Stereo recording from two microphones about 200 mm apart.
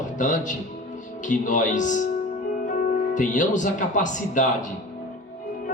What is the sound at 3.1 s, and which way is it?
Speech, 40° left (ahead or behind).